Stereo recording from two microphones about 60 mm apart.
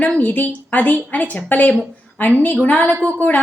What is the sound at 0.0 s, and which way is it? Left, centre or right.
A woman's voice, left.